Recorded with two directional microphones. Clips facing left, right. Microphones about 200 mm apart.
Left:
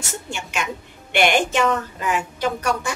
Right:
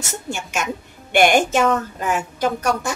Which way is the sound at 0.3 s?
45° right (ahead or behind).